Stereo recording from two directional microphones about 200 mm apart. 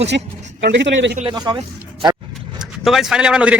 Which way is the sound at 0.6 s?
60° right (ahead or behind).